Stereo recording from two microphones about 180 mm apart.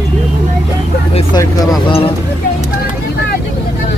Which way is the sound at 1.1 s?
35° left (ahead or behind).